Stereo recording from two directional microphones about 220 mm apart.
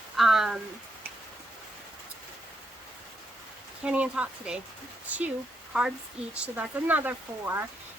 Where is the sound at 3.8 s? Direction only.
5° right (ahead or behind).